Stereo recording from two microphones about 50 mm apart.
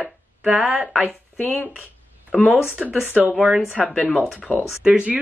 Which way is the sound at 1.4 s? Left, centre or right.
Left.